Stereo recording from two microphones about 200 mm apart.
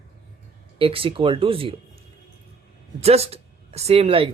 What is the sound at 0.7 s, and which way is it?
Speech, 25° right (ahead or behind).